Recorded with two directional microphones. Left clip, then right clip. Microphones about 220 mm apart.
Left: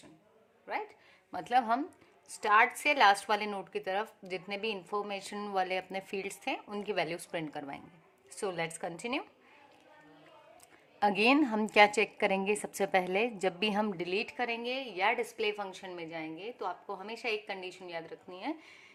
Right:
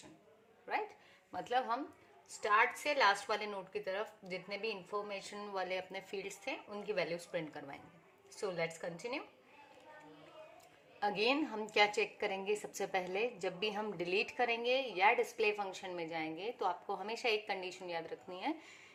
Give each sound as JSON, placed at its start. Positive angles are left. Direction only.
{"t": 0.7, "sound": "a sound", "side_deg": 20}
{"t": 1.3, "sound": "a woman's voice", "side_deg": 35}
{"t": 11.0, "sound": "a woman's voice", "side_deg": 40}